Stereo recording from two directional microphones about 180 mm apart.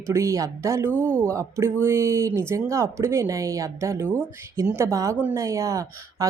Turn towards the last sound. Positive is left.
turn(degrees=-15)  # may be behind; listen again after turning